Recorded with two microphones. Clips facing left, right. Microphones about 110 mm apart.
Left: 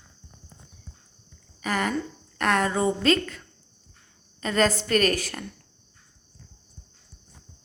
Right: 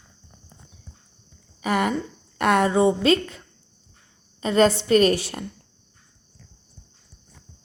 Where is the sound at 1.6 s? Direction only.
20° right (ahead or behind).